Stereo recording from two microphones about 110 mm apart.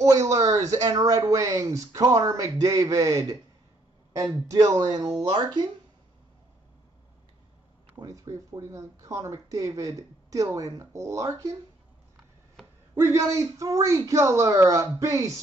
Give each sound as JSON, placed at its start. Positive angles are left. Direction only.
{"t": 0.0, "sound": "a woman's voice", "side_deg": -30}
{"t": 8.0, "sound": "speech", "side_deg": -30}
{"t": 12.9, "sound": "speech", "side_deg": -25}